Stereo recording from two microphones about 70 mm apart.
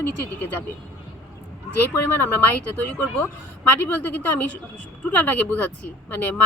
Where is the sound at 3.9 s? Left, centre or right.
Left.